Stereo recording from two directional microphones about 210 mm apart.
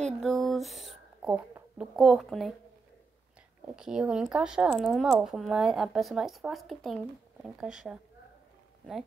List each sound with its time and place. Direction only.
0.0 s speech: centre (ahead or behind)
3.6 s speech: 5° right (ahead or behind)